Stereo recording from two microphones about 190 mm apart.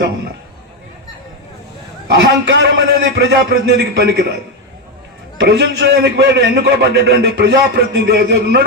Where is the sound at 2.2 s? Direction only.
65° right (ahead or behind).